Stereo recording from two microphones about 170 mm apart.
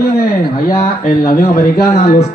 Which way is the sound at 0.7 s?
55° left (ahead or behind).